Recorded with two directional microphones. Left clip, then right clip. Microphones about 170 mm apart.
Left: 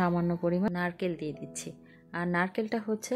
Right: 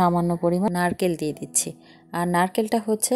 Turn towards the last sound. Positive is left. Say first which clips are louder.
# right 9 dB
turn(degrees=-35)  # may be behind; listen again after turning